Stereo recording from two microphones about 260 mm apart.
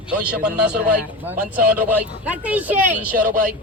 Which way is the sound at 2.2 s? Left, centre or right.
Centre.